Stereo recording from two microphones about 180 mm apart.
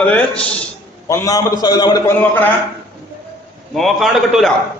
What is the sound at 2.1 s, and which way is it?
Speech, 10° left (ahead or behind).